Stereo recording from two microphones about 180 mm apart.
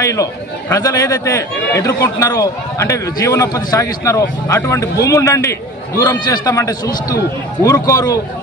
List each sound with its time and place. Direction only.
0.0 s a man's voice: 15° left (ahead or behind)